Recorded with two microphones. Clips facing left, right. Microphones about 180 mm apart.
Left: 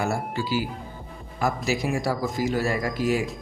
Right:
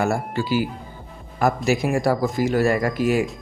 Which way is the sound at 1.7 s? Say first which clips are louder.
Right 6 dB; 55° right (ahead or behind).